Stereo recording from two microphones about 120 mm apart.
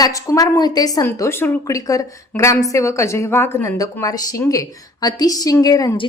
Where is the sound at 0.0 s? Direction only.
30° left (ahead or behind).